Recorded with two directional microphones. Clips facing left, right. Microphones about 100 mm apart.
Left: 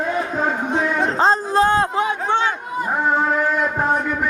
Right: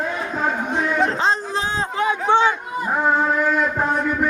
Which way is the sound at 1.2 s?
45° left (ahead or behind).